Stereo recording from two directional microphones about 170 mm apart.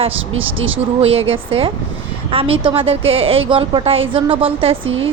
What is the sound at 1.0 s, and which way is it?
A woman's voice, 35° right (ahead or behind).